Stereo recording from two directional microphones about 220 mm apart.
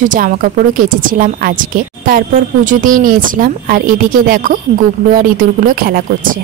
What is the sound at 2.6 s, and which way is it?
A woman's voice, 40° right (ahead or behind).